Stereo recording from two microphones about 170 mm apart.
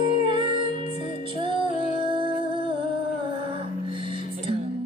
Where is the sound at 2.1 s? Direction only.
30° right (ahead or behind).